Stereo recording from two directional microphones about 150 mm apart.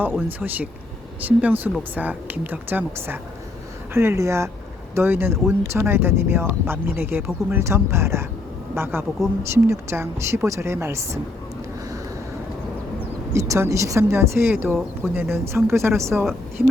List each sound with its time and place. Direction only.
0.0 s speech: 10° right (ahead or behind)
13.3 s speech: 20° right (ahead or behind)